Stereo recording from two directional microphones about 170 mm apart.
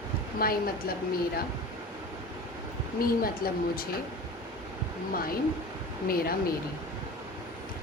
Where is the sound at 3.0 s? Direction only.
60° left (ahead or behind).